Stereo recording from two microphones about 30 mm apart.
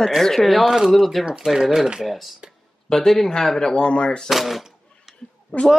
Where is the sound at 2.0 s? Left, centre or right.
Centre.